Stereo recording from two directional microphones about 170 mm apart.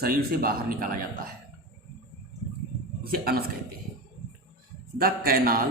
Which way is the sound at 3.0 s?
65° right (ahead or behind).